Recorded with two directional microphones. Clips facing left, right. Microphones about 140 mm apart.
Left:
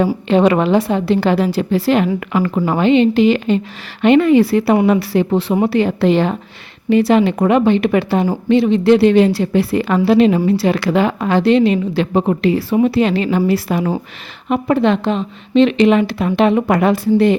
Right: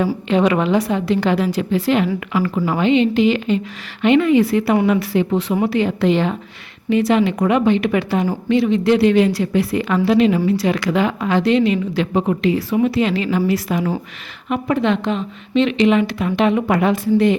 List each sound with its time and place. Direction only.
0.3 s a woman's voice: 35° left (ahead or behind)
2.3 s a woman's voice: 50° left (ahead or behind)